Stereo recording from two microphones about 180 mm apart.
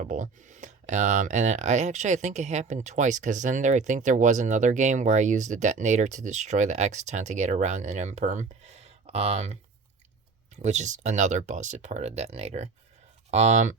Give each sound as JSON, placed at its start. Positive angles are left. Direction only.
{"t": 0.0, "sound": "speech", "side_deg": -45}